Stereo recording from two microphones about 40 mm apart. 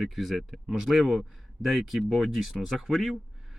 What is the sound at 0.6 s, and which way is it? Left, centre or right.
A man's voice, centre.